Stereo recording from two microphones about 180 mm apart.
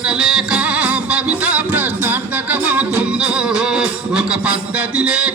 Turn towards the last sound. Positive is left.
turn(degrees=-5)  # may be behind; listen again after turning